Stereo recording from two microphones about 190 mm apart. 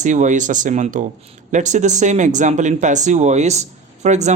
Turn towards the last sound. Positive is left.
turn(degrees=-40)  # may be behind; listen again after turning